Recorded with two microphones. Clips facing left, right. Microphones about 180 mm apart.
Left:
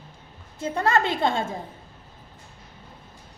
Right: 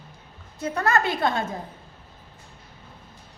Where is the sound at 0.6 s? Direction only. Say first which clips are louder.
Left 1 dB; 25° left (ahead or behind).